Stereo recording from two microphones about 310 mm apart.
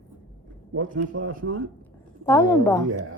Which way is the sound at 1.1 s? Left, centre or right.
Right.